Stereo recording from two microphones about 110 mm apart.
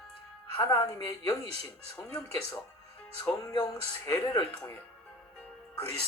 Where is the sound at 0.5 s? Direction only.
30° left (ahead or behind).